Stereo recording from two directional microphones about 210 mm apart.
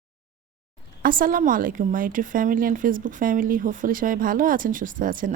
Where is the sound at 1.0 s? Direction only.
40° right (ahead or behind).